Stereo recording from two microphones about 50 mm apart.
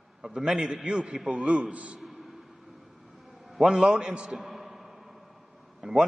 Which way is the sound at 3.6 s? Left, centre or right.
Centre.